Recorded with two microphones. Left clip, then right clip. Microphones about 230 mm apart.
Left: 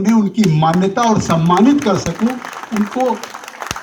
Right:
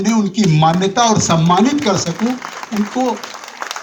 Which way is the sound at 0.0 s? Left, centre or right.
Right.